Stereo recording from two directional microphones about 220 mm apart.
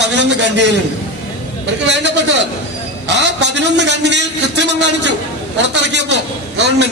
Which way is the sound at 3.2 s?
50° right (ahead or behind).